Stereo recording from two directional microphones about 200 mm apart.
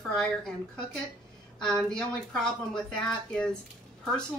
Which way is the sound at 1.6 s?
5° left (ahead or behind).